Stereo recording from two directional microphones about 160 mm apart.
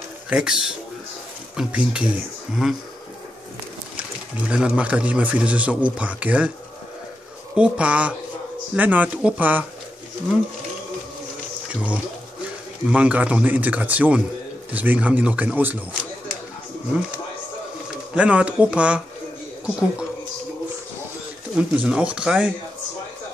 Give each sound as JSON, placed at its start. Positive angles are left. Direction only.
{"t": 0.3, "sound": "a man's voice", "side_deg": -5}
{"t": 4.5, "sound": "a man's voice", "side_deg": -5}
{"t": 7.5, "sound": "a man's voice", "side_deg": -5}
{"t": 11.7, "sound": "a man's voice", "side_deg": -10}
{"t": 18.1, "sound": "a man's voice", "side_deg": -5}
{"t": 21.5, "sound": "a man's voice", "side_deg": -5}